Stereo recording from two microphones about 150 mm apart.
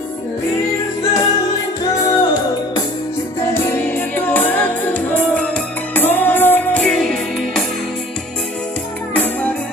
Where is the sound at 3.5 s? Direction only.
15° left (ahead or behind).